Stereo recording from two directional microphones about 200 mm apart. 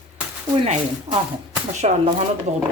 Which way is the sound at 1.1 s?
30° right (ahead or behind).